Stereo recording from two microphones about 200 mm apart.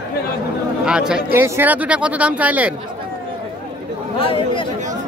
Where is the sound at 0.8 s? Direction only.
5° right (ahead or behind).